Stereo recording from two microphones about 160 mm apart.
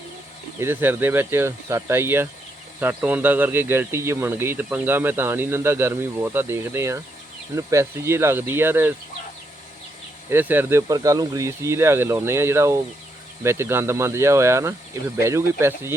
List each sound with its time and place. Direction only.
0.6 s speech: 15° right (ahead or behind)
10.2 s speech: 10° right (ahead or behind)